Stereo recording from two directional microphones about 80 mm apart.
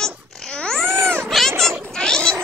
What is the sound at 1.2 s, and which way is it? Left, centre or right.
Cat, centre.